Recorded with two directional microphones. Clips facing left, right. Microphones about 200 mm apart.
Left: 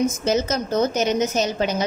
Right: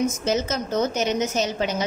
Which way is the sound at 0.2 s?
40° left (ahead or behind).